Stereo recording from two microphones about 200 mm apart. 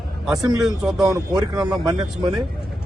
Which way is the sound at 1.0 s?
20° right (ahead or behind).